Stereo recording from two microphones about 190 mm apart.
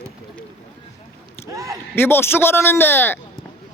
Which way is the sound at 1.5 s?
15° right (ahead or behind).